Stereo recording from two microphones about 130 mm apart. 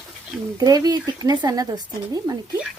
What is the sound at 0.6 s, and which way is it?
Speech, 30° right (ahead or behind).